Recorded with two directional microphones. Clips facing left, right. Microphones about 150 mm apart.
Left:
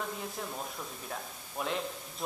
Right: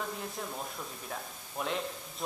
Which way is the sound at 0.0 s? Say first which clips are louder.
Even; centre (ahead or behind).